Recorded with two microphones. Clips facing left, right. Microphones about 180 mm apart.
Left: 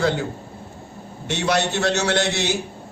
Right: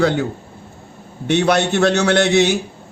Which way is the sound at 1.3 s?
60° right (ahead or behind).